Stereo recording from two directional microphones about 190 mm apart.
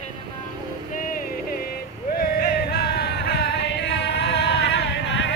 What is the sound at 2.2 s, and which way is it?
Music, 50° left (ahead or behind).